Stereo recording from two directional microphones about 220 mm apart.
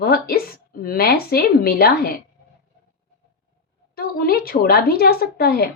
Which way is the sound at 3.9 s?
45° left (ahead or behind).